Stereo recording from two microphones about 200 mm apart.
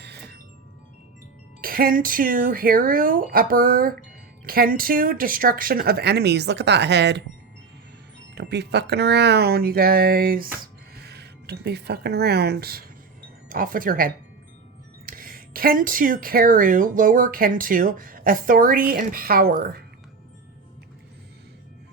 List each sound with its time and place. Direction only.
0.0 s music: 55° right (ahead or behind)
1.6 s speech: 45° right (ahead or behind)
8.4 s speech: 55° right (ahead or behind)